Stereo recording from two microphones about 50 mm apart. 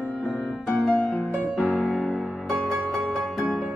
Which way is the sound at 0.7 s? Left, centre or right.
Left.